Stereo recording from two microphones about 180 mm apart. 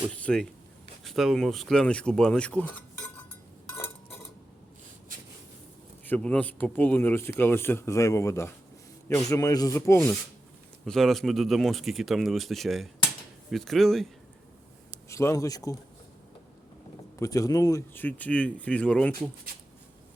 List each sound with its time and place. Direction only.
0.2 s speech: 5° left (ahead or behind)
3.7 s cutlery: 10° left (ahead or behind)
6.1 s speech: 5° left (ahead or behind)
10.8 s speech: centre (ahead or behind)
15.1 s speech: 15° left (ahead or behind)
17.2 s speech: 20° left (ahead or behind)